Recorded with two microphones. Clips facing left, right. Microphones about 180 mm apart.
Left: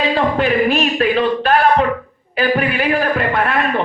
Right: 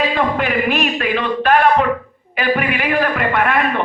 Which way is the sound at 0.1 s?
35° left (ahead or behind).